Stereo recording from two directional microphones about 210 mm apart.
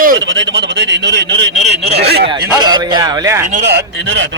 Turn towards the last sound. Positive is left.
turn(degrees=-15)  # may be behind; listen again after turning